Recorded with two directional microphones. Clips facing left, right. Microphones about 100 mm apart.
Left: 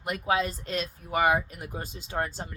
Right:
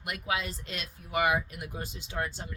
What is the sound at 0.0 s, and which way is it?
Speech, 35° left (ahead or behind).